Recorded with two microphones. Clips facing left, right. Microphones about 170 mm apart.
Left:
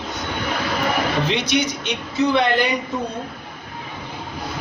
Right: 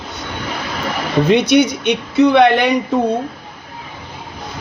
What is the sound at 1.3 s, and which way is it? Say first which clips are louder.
Speech: right 9 dB; 55° right (ahead or behind).